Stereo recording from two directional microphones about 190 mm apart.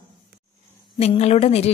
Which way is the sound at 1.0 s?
35° left (ahead or behind).